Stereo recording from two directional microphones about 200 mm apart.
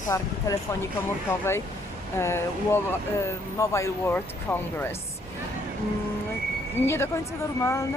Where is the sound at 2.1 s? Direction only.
15° left (ahead or behind).